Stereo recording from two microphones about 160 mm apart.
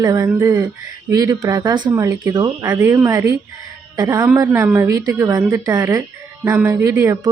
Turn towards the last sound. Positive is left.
turn(degrees=-15)  # may be behind; listen again after turning